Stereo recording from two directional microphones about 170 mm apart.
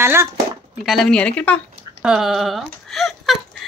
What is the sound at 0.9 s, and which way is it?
Speech, 5° left (ahead or behind).